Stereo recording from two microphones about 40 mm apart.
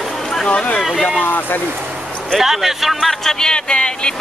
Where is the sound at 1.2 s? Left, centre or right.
Left.